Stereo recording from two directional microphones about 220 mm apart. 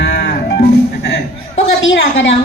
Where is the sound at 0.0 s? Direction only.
50° left (ahead or behind).